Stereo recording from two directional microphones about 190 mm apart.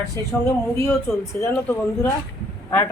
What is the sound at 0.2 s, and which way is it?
Speech, 15° left (ahead or behind).